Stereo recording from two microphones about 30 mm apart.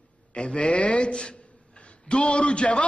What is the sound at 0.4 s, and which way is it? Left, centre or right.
Speech, left.